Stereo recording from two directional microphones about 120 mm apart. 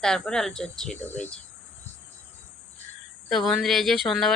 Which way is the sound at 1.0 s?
15° left (ahead or behind).